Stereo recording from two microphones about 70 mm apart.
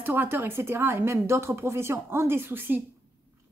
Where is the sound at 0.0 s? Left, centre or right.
Right.